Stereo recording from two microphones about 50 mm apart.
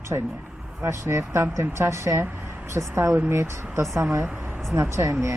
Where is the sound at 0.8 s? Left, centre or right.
Right.